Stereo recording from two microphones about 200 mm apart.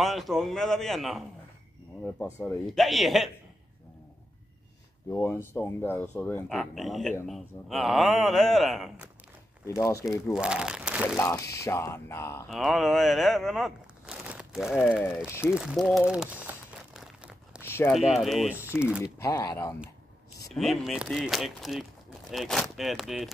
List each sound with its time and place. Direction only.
0.0 s speech: centre (ahead or behind)
5.1 s speech: 10° left (ahead or behind)
9.7 s speech: 15° left (ahead or behind)
10.3 s speech: 5° right (ahead or behind)
11.1 s speech: 15° left (ahead or behind)
12.4 s speech: centre (ahead or behind)
15.4 s crumpling: 5° right (ahead or behind)
17.6 s a sound: 10° left (ahead or behind)
17.9 s speech: centre (ahead or behind)
19.1 s speech: 15° left (ahead or behind)
20.5 s speech: centre (ahead or behind)